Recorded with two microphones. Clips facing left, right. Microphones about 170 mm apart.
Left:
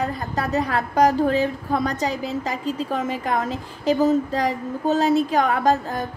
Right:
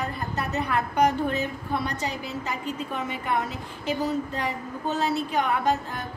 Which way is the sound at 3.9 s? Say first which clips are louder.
Left 9 dB; 45° left (ahead or behind).